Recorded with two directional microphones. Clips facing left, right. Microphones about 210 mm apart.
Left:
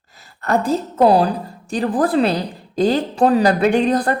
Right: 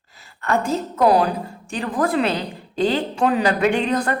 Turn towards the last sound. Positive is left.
turn(degrees=35)  # may be behind; listen again after turning